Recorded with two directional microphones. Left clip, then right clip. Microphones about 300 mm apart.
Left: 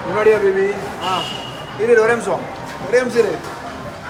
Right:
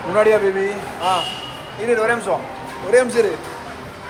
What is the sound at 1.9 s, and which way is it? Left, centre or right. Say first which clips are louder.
A man's voice: left 4 dB; centre.